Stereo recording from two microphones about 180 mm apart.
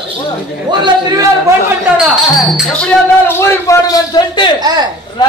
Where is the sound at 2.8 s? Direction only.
15° left (ahead or behind).